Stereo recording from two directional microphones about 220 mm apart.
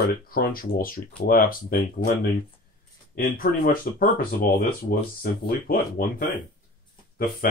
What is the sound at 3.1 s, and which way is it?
Speech, 40° left (ahead or behind).